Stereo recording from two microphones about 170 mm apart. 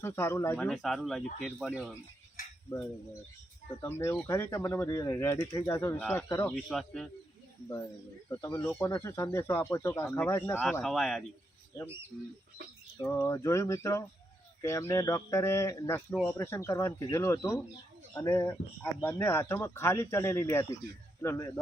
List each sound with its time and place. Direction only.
0.0 s speech: 15° left (ahead or behind)
3.8 s speech: 15° left (ahead or behind)
6.0 s speech: 5° left (ahead or behind)
6.2 s speech: 20° left (ahead or behind)
6.5 s speech: centre (ahead or behind)
8.3 s speech: 15° left (ahead or behind)
10.7 s speech: 5° left (ahead or behind)
11.7 s speech: 20° left (ahead or behind)
13.0 s speech: 15° left (ahead or behind)